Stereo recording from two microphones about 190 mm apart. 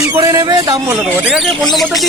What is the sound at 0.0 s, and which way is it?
Speech, 15° right (ahead or behind).